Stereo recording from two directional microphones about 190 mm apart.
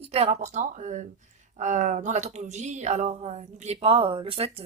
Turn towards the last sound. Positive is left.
turn(degrees=-30)  # may be behind; listen again after turning